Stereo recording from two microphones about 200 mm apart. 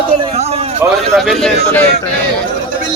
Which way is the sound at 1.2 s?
Centre (ahead or behind).